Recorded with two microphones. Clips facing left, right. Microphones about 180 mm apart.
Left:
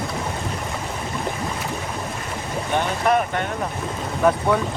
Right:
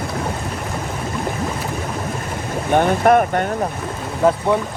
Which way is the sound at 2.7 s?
50° right (ahead or behind).